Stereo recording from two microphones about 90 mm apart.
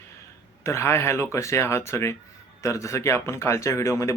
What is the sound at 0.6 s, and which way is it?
Speech, 30° left (ahead or behind).